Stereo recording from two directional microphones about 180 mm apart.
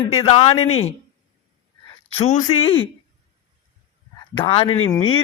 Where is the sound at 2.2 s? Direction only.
40° left (ahead or behind).